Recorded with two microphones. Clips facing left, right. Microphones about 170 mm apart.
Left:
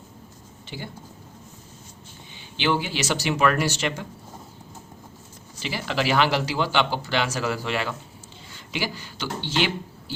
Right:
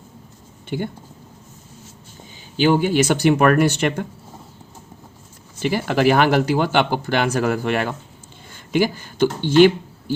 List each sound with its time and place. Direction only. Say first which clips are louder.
0.7 s speech: right 11 dB; 55° right (ahead or behind)
2.6 s speech: right 9 dB; 45° right (ahead or behind)
5.5 s speech: right 8 dB; 50° right (ahead or behind)